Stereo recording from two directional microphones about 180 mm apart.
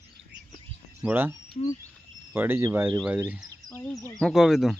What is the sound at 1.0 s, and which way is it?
Speech, 10° right (ahead or behind).